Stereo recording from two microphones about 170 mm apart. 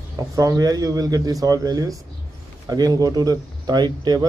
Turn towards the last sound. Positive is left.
turn(degrees=-25)  # may be behind; listen again after turning